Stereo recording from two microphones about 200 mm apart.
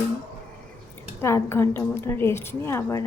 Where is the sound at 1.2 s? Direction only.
15° left (ahead or behind).